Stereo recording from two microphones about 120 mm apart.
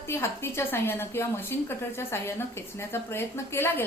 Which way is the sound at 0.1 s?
20° left (ahead or behind).